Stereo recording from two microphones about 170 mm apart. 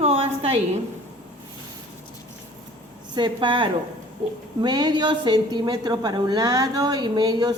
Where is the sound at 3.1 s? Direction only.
30° right (ahead or behind).